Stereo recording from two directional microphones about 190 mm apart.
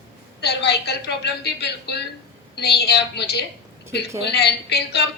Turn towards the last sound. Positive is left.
turn(degrees=60)  # may be behind; listen again after turning